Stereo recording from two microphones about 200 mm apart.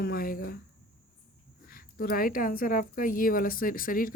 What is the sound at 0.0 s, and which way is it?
Speech, 50° left (ahead or behind).